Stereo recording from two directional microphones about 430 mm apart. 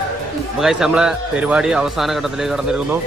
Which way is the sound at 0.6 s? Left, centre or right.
Centre.